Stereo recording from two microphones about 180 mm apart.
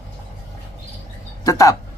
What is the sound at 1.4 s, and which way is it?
Speech, 20° left (ahead or behind).